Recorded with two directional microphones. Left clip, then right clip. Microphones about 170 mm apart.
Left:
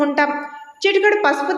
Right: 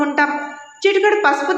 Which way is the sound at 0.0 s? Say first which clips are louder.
Right 1 dB; 35° left (ahead or behind).